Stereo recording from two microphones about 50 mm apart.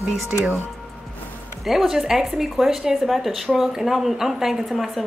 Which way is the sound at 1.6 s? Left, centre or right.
Centre.